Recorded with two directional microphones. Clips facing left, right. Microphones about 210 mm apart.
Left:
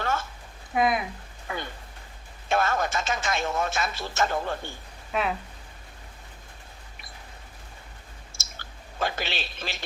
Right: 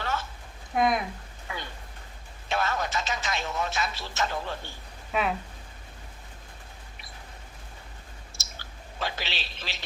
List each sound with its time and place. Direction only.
0.0 s a sound: 50° left (ahead or behind)
0.7 s speech: centre (ahead or behind)
1.5 s a sound: 50° left (ahead or behind)
2.5 s speech: 50° left (ahead or behind)
5.1 s speech: centre (ahead or behind)
8.3 s clicking: 50° left (ahead or behind)